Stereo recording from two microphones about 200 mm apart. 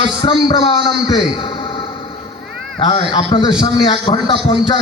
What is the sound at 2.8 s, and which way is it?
A man's voice, 25° left (ahead or behind).